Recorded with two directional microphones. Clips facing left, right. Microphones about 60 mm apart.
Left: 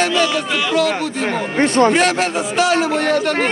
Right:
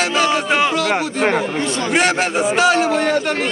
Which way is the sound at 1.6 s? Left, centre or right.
Left.